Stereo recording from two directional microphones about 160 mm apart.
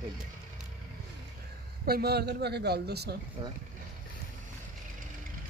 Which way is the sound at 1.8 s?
80° right.